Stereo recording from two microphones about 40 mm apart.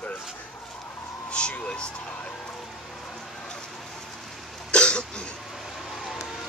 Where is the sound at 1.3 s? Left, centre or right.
Left.